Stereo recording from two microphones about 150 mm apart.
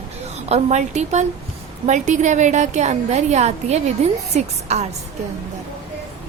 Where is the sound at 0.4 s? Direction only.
45° right (ahead or behind).